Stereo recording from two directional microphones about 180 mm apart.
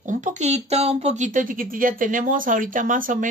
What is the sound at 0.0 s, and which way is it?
Speech, 45° right (ahead or behind).